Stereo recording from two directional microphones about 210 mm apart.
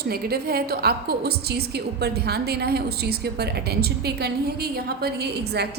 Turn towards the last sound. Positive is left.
turn(degrees=-50)  # may be behind; listen again after turning